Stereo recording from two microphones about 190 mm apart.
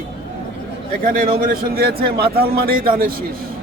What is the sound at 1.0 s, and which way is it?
A man's voice, 45° right (ahead or behind).